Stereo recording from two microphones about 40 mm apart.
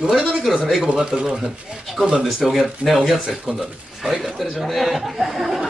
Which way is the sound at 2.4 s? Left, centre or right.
Centre.